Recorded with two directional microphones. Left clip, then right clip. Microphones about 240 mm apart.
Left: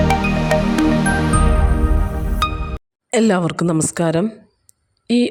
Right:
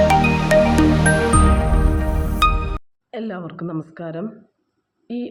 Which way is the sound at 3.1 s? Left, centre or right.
Left.